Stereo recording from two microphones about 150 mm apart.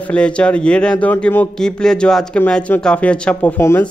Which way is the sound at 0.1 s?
5° left (ahead or behind).